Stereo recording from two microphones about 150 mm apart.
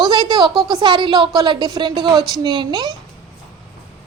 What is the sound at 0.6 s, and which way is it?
A woman's voice, 30° right (ahead or behind).